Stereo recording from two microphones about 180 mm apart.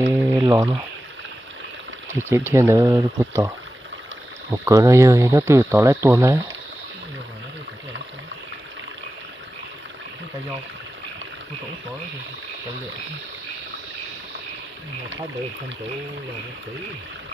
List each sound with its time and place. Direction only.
0.1 s a sound: 15° right (ahead or behind)
2.1 s speech: 15° right (ahead or behind)
4.6 s speech: 15° right (ahead or behind)